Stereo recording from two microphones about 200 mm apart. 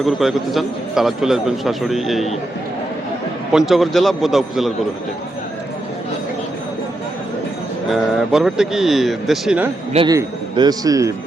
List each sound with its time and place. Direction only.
0.0 s a man's voice: centre (ahead or behind)
3.7 s a man's voice: centre (ahead or behind)
7.9 s a man's voice: centre (ahead or behind)
9.9 s a man's voice: 25° right (ahead or behind)